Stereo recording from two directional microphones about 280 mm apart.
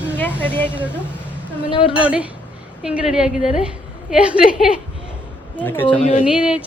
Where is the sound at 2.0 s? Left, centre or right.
Centre.